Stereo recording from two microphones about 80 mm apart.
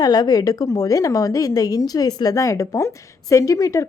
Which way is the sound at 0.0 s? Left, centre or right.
Left.